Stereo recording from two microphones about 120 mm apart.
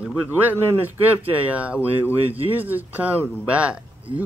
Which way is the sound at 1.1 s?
15° right (ahead or behind).